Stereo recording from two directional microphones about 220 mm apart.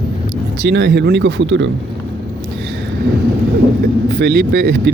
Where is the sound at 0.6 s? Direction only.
55° right (ahead or behind).